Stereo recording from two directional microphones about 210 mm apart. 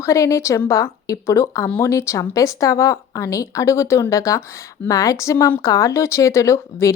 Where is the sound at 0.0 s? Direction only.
15° left (ahead or behind).